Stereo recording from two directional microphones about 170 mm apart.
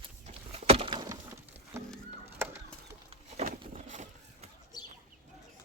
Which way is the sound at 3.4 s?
45° right (ahead or behind).